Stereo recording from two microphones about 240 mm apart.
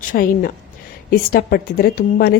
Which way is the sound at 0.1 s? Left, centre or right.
Left.